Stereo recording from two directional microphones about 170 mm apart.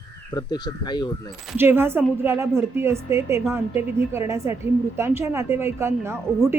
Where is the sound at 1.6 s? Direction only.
15° right (ahead or behind).